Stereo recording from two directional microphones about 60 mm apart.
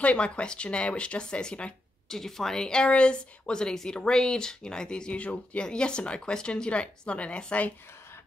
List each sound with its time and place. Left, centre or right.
0.0 s a woman's voice: centre